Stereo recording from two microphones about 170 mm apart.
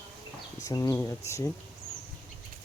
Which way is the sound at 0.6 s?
20° left (ahead or behind).